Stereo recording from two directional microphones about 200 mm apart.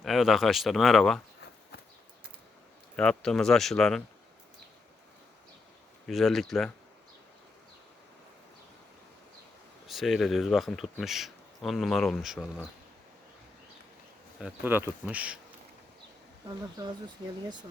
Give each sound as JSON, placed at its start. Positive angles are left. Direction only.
{"t": 0.0, "sound": "speech", "side_deg": 0}
{"t": 2.9, "sound": "speech", "side_deg": 5}
{"t": 6.1, "sound": "speech", "side_deg": 0}
{"t": 9.8, "sound": "speech", "side_deg": 0}
{"t": 14.4, "sound": "speech", "side_deg": -10}
{"t": 16.6, "sound": "speech", "side_deg": -20}